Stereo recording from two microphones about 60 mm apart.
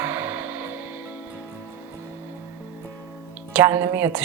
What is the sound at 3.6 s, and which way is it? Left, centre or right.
Speech, right.